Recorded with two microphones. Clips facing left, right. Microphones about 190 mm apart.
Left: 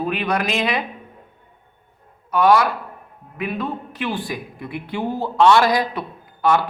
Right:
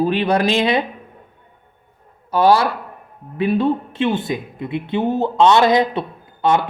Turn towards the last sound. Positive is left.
turn(degrees=-25)  # may be behind; listen again after turning